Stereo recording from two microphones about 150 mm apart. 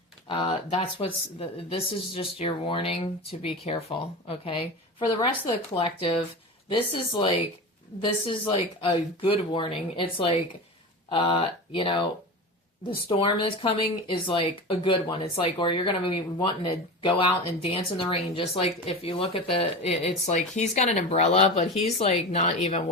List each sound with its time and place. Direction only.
0.3 s speech: 35° left (ahead or behind)
5.7 s speech: 35° left (ahead or behind)